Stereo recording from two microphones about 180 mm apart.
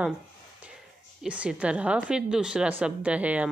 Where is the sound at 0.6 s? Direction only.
5° right (ahead or behind).